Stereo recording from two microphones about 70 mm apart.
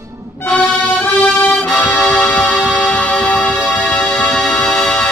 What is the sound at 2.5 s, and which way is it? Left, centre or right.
Music, centre.